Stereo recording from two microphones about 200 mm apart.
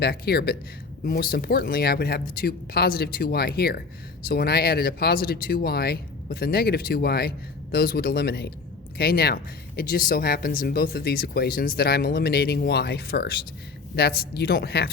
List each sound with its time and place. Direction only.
0.0 s speech: 50° left (ahead or behind)